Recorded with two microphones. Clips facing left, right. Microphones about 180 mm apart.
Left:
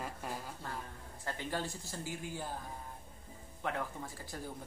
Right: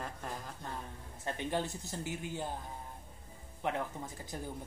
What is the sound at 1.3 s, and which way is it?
Speech, 20° right (ahead or behind).